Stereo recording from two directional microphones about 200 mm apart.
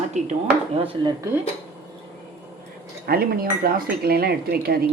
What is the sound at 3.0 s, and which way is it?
Speech, 50° right (ahead or behind).